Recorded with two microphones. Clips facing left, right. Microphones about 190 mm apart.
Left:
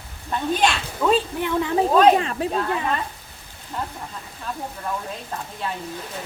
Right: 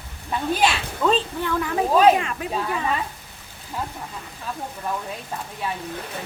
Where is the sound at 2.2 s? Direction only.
30° left (ahead or behind).